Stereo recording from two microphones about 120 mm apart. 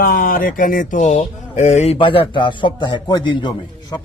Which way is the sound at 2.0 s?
45° left (ahead or behind).